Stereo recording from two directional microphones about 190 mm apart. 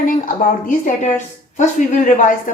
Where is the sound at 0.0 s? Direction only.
45° left (ahead or behind).